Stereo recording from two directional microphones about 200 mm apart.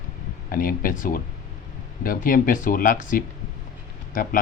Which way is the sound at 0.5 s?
45° left (ahead or behind).